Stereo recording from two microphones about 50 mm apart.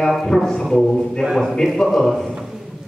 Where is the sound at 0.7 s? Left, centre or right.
Centre.